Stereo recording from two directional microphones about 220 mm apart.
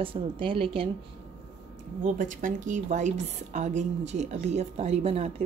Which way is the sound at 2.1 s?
35° right (ahead or behind).